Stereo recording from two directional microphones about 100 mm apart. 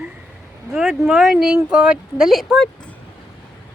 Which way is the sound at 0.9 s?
5° right (ahead or behind).